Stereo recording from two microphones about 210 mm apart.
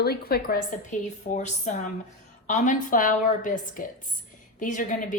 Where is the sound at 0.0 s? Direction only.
50° left (ahead or behind).